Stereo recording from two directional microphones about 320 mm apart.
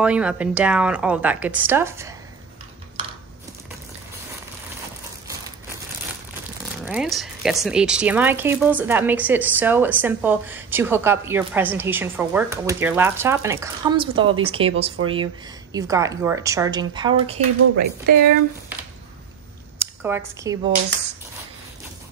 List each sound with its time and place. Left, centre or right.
0.0 s speech: centre
6.8 s speech: centre
15.7 s a woman's voice: centre
17.7 s speech: right
19.8 s speech: centre